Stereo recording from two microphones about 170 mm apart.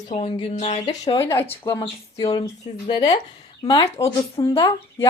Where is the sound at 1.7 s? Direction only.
30° left (ahead or behind).